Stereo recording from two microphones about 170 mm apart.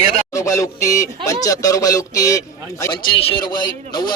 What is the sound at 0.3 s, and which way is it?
A man's voice, 20° left (ahead or behind).